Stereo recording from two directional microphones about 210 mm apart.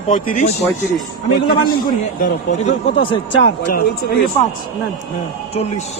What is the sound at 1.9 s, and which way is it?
Speech, 40° left (ahead or behind).